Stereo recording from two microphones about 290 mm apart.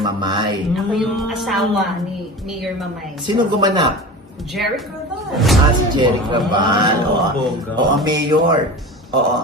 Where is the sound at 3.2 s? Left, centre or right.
Centre.